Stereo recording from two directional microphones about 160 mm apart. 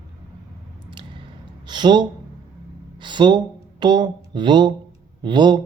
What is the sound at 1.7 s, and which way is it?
Speech, 30° right (ahead or behind).